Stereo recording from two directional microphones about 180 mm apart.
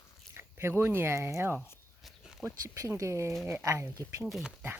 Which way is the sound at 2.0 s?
Centre (ahead or behind).